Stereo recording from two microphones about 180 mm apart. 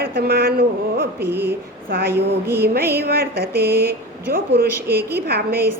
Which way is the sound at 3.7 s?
15° right (ahead or behind).